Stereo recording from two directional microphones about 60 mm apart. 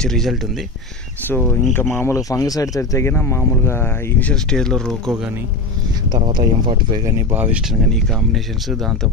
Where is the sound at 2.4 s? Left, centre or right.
Left.